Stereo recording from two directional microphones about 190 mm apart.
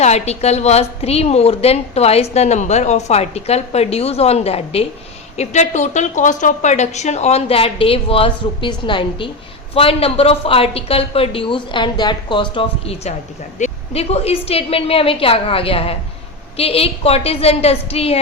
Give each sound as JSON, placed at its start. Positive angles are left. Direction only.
{"t": 0.0, "sound": "a woman's voice", "side_deg": 35}